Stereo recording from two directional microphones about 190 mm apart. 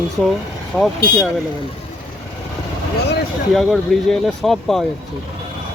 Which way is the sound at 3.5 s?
Centre (ahead or behind).